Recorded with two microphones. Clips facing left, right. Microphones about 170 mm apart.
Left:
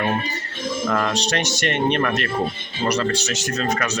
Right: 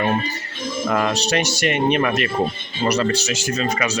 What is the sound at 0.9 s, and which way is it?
Speech, 10° right (ahead or behind).